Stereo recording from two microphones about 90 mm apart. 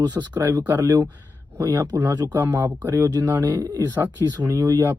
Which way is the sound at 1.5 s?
35° right (ahead or behind).